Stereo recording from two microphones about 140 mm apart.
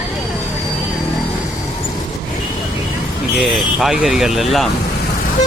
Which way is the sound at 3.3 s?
Centre (ahead or behind).